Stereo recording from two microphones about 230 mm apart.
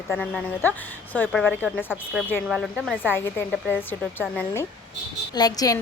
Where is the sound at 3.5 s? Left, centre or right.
Centre.